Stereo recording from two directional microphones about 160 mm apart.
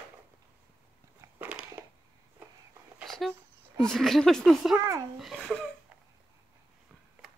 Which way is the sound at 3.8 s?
5° left (ahead or behind).